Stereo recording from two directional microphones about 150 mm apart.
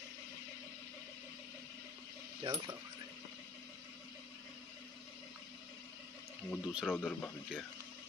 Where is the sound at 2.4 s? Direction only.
25° right (ahead or behind).